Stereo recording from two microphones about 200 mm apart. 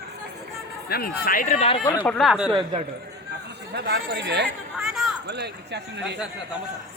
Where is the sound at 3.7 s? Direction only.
55° right (ahead or behind).